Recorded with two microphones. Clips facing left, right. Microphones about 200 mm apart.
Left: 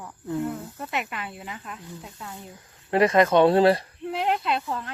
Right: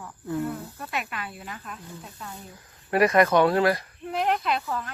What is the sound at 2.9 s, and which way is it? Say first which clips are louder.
Speech: left 1 dB; 25° left (ahead or behind).